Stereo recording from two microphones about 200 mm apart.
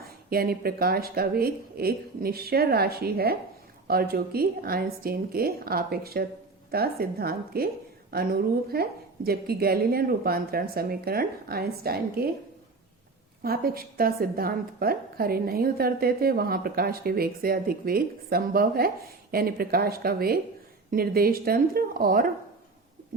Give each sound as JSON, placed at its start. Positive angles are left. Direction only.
{"t": 0.0, "sound": "a woman's voice", "side_deg": -50}
{"t": 13.4, "sound": "a woman's voice", "side_deg": -50}